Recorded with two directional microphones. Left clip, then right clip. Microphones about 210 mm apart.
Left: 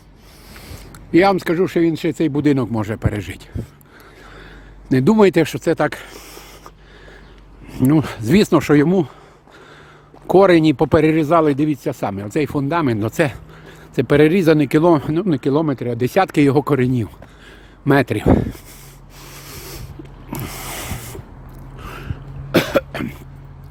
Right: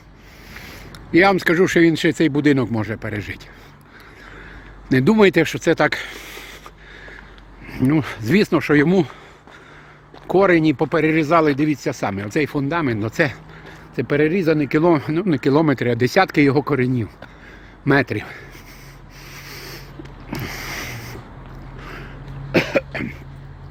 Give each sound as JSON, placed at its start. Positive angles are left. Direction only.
{"t": 0.6, "sound": "speech", "side_deg": 20}
{"t": 2.8, "sound": "speech", "side_deg": 25}
{"t": 4.9, "sound": "speech", "side_deg": 15}
{"t": 7.7, "sound": "speech", "side_deg": 20}
{"t": 10.2, "sound": "speech", "side_deg": 25}
{"t": 13.9, "sound": "speech", "side_deg": 30}
{"t": 19.3, "sound": "rub", "side_deg": 25}
{"t": 20.3, "sound": "a sound", "side_deg": 20}
{"t": 22.5, "sound": "cough", "side_deg": 30}